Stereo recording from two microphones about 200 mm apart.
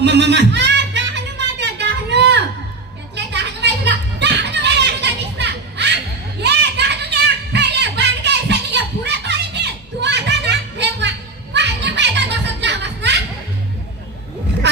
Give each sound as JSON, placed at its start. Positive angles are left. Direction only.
{"t": 0.0, "sound": "music", "side_deg": -60}
{"t": 5.4, "sound": "children playing", "side_deg": -60}
{"t": 6.4, "sound": "a sound", "side_deg": -55}
{"t": 11.5, "sound": "music", "side_deg": -60}